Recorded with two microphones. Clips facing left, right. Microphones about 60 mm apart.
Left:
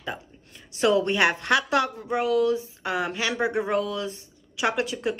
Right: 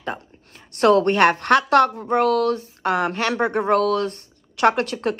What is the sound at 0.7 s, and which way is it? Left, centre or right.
Speech, right.